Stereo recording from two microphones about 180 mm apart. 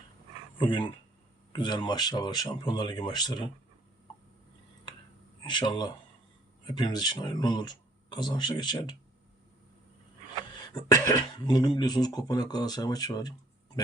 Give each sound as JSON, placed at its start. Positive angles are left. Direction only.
{"t": 0.6, "sound": "speech", "side_deg": 30}
{"t": 5.4, "sound": "speech", "side_deg": 25}
{"t": 10.5, "sound": "speech", "side_deg": 20}